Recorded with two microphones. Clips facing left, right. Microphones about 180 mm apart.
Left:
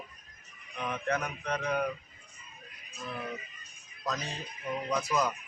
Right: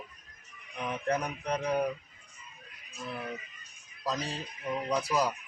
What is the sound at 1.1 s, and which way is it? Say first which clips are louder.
Speech: right 2 dB; 35° right (ahead or behind).